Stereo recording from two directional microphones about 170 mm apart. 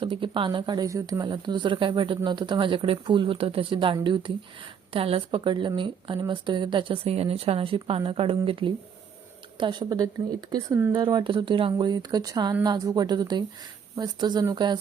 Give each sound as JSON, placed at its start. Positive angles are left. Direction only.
{"t": 0.0, "sound": "a woman's voice", "side_deg": -30}